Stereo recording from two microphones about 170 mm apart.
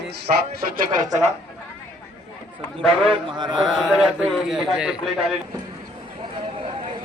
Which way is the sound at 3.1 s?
25° right (ahead or behind).